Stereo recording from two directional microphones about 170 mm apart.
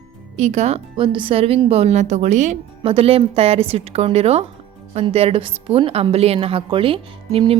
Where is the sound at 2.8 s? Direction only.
35° right (ahead or behind).